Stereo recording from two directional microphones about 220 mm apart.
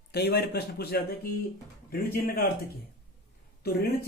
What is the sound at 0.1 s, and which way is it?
Speech, 50° left (ahead or behind).